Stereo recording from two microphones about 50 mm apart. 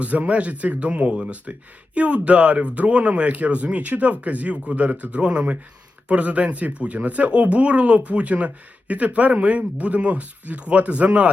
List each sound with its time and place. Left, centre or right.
0.0 s speech: right